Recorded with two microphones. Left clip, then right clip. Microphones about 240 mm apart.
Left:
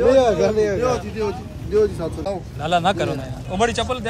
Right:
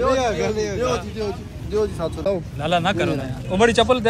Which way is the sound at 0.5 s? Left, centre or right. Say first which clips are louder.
Left 3 dB; centre.